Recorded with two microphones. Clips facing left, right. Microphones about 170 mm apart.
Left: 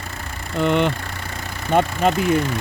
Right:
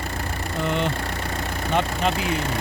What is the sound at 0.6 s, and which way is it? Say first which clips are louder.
Speech: left 7 dB; 65° left (ahead or behind).